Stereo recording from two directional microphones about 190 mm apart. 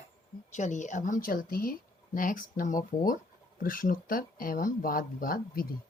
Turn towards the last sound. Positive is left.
turn(degrees=50)  # may be behind; listen again after turning